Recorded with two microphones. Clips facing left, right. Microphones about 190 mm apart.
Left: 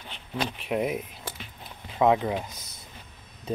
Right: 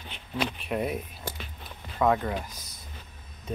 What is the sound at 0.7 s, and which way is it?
Speech, 15° left (ahead or behind).